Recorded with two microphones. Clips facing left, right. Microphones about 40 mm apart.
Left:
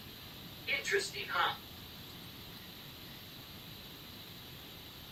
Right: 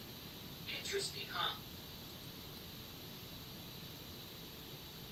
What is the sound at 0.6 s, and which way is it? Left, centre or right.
Speech, left.